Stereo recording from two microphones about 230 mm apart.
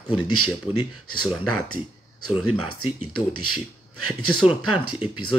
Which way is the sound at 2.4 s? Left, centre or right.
Left.